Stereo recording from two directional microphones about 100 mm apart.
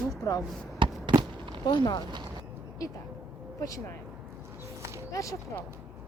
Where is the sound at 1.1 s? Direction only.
55° right (ahead or behind).